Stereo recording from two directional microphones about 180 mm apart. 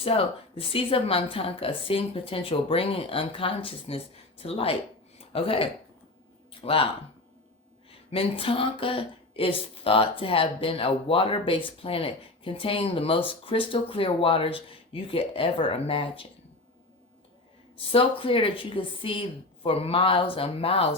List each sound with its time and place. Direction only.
0.0 s speech: 30° left (ahead or behind)
6.5 s a sound: 30° left (ahead or behind)
7.9 s a woman's voice: 30° left (ahead or behind)
17.9 s a woman's voice: 30° left (ahead or behind)